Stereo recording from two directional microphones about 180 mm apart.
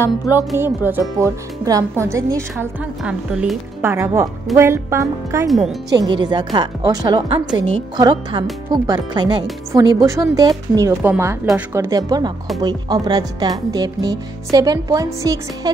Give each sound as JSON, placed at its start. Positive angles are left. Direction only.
{"t": 0.0, "sound": "music", "side_deg": 15}
{"t": 0.6, "sound": "speech", "side_deg": -10}
{"t": 3.0, "sound": "speech", "side_deg": -5}
{"t": 5.5, "sound": "speech", "side_deg": 0}
{"t": 5.9, "sound": "speech", "side_deg": -25}